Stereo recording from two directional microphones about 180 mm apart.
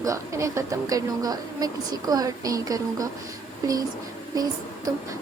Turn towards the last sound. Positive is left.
turn(degrees=-20)  # may be behind; listen again after turning